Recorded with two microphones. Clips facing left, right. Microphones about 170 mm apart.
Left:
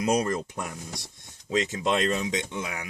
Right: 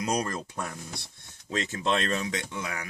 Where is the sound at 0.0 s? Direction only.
25° left (ahead or behind).